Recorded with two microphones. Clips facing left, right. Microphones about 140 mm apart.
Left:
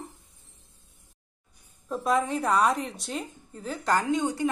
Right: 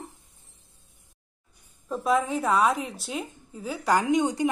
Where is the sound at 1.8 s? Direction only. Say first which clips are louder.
Right 1 dB; centre (ahead or behind).